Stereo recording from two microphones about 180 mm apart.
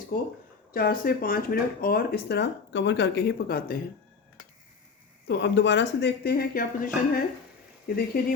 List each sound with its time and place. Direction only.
0.7 s speech: 55° left (ahead or behind)
5.3 s speech: 75° left (ahead or behind); by 8.2 s 55° left (ahead or behind)